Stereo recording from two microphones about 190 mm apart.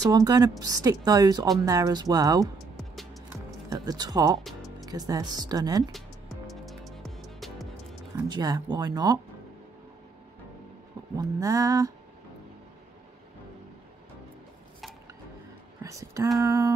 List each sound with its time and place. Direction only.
0.0 s speech: 20° right (ahead or behind)
2.4 s music: centre (ahead or behind)
3.7 s speech: 20° right (ahead or behind)
4.5 s music: centre (ahead or behind)
4.8 s speech: 20° right (ahead or behind)
6.4 s music: centre (ahead or behind)
8.3 s speech: 20° right (ahead or behind)
11.1 s music: 15° right (ahead or behind)
15.8 s a sound: 15° right (ahead or behind)
16.3 s music: 15° right (ahead or behind)